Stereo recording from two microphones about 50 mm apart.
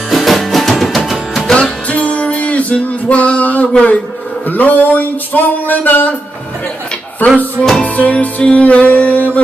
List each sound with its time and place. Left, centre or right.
0.1 s music: centre
1.5 s music: left
4.5 s a sound: left
7.2 s music: left